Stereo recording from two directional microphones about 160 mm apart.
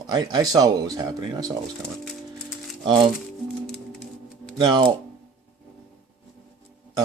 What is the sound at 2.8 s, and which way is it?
Speech, 30° right (ahead or behind).